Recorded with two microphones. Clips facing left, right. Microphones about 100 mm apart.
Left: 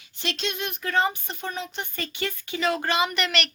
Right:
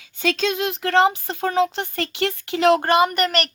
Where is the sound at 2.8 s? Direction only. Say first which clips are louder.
Right 7 dB; 50° right (ahead or behind).